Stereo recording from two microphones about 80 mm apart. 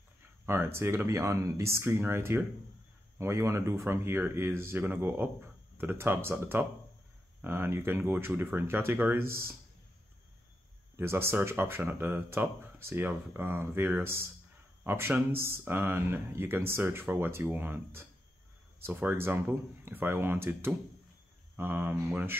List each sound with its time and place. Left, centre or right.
0.5 s speech: right
11.0 s speech: right